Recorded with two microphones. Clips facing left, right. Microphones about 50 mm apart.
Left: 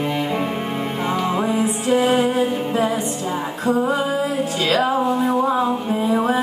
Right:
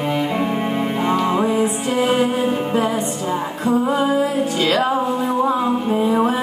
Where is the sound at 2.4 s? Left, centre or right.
Centre.